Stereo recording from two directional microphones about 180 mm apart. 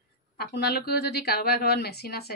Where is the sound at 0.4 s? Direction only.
60° left (ahead or behind).